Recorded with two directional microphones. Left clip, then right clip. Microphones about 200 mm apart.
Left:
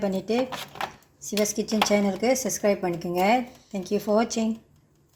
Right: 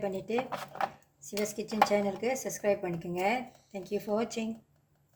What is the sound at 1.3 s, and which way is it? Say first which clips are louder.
Speech: left 9 dB; 55° left (ahead or behind).